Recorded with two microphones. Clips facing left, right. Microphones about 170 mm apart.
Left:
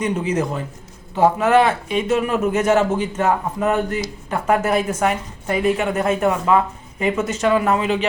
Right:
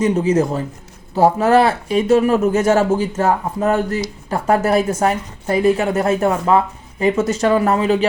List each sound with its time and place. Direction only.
0.0 s speech: 30° right (ahead or behind)